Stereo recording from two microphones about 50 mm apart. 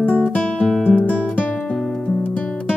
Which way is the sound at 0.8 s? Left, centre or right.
Left.